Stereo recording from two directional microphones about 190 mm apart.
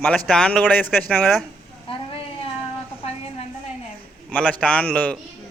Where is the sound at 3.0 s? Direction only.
30° left (ahead or behind).